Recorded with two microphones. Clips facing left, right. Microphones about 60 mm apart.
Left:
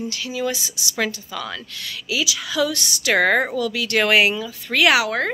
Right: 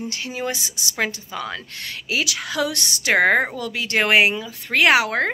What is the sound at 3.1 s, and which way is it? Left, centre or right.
Speech, right.